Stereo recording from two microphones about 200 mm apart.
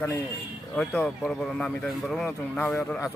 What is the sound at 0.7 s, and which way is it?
Speech, centre (ahead or behind).